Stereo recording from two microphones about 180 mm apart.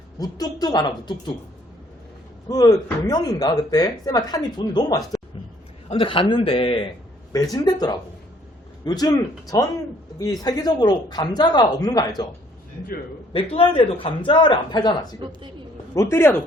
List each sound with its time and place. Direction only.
0.2 s a man's voice: 20° left (ahead or behind)
2.5 s a man's voice: 20° left (ahead or behind)
13.3 s a man's voice: 30° left (ahead or behind)
15.2 s speech: 25° right (ahead or behind)
16.0 s speech: 15° left (ahead or behind)